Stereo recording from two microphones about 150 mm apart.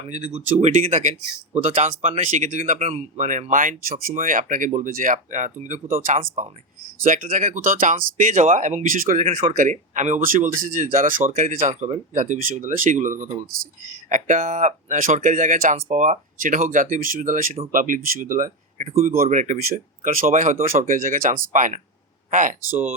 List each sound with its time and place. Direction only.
0.1 s speech: 50° right (ahead or behind); by 9.2 s 65° right (ahead or behind)
9.2 s speech: 45° right (ahead or behind)
9.6 s speech: 55° right (ahead or behind)